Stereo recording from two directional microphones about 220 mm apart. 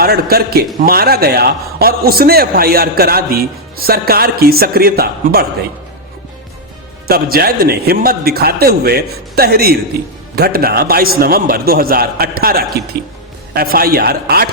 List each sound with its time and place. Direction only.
0.0 s a man's voice: 45° right (ahead or behind)
7.1 s a man's voice: 45° right (ahead or behind)